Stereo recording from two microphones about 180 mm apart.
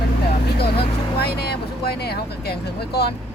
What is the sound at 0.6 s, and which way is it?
Speech, 60° left (ahead or behind).